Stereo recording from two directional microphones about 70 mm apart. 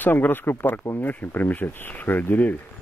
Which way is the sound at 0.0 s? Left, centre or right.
Left.